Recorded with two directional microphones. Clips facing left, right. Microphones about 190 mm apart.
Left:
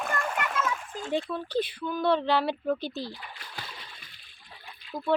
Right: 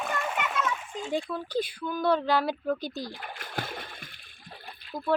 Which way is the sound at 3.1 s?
50° right (ahead or behind).